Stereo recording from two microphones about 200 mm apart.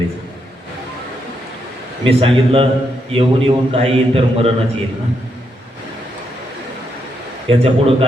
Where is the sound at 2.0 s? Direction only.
25° right (ahead or behind).